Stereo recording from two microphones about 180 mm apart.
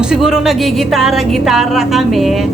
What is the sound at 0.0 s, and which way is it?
A woman's voice, 5° right (ahead or behind).